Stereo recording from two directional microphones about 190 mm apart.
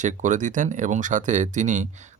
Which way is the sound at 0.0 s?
40° right (ahead or behind).